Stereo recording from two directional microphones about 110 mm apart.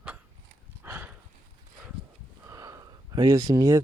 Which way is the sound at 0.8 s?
20° right (ahead or behind).